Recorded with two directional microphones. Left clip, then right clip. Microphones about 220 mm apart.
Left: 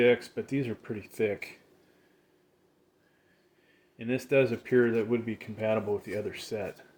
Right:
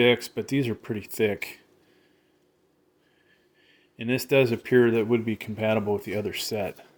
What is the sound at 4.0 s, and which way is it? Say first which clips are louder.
Speech: right 4 dB; 45° right (ahead or behind).